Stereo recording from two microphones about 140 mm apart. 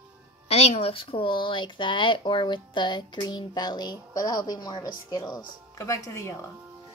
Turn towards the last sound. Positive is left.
turn(degrees=20)  # may be behind; listen again after turning